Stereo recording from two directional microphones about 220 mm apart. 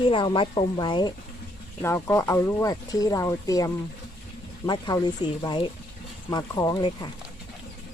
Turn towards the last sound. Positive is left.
turn(degrees=20)  # may be behind; listen again after turning